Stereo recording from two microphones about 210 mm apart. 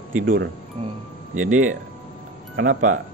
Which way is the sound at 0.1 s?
40° right (ahead or behind).